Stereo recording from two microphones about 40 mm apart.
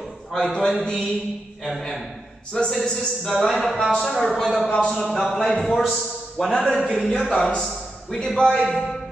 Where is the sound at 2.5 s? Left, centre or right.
Centre.